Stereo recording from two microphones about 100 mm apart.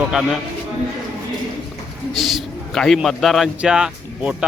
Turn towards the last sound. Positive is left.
turn(degrees=-10)  # may be behind; listen again after turning